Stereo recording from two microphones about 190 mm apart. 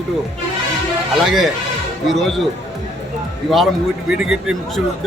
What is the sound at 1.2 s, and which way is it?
A man's voice, centre (ahead or behind).